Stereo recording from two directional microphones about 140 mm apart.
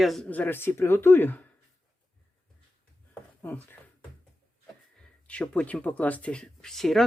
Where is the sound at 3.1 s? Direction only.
10° left (ahead or behind).